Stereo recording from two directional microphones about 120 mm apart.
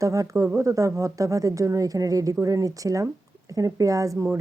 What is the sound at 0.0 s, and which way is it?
Speech, 30° right (ahead or behind).